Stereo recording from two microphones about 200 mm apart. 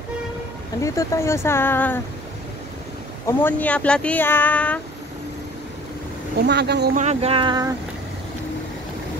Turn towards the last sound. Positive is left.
turn(degrees=-20)  # may be behind; listen again after turning